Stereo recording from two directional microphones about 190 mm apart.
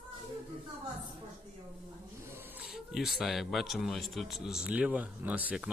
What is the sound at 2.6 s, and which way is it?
Speech, 5° right (ahead or behind).